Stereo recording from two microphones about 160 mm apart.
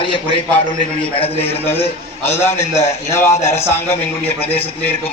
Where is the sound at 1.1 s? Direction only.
40° left (ahead or behind).